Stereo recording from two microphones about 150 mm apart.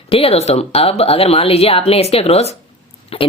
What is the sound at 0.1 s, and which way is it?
Speech, 40° left (ahead or behind).